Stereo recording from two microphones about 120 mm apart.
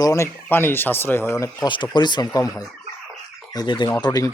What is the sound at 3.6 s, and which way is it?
Speech, 40° left (ahead or behind).